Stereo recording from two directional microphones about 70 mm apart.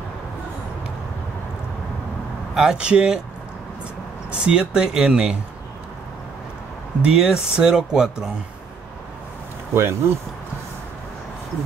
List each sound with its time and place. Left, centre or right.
2.5 s speech: centre
4.3 s speech: centre
7.0 s speech: centre
9.8 s speech: right